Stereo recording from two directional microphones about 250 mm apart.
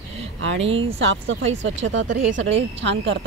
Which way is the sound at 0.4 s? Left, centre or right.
Right.